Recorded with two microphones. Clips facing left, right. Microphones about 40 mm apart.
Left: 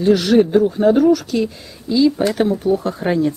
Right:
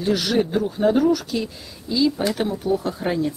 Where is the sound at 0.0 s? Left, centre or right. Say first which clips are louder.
Left 8 dB; centre.